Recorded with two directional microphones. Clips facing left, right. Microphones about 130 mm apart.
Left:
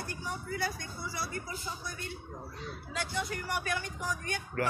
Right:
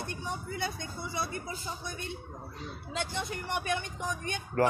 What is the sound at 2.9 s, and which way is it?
Speech, 25° right (ahead or behind).